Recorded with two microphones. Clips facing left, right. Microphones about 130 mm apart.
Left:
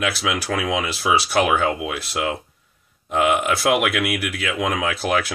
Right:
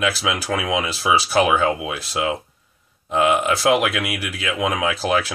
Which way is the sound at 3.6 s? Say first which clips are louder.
Right 1 dB; centre (ahead or behind).